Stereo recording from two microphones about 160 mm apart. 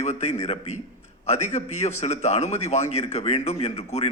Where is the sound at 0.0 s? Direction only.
45° left (ahead or behind).